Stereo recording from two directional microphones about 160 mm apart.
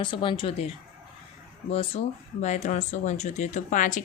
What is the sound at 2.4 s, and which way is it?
Speech, 45° left (ahead or behind).